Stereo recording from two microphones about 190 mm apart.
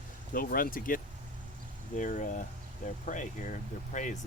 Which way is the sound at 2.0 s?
40° left (ahead or behind).